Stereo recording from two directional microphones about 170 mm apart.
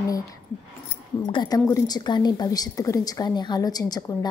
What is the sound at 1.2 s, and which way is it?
A woman's voice, 25° left (ahead or behind).